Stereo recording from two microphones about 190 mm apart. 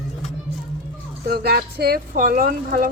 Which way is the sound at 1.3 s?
55° right (ahead or behind).